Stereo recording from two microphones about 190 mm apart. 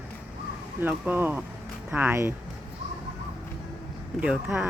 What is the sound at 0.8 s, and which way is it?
Speech, 10° right (ahead or behind).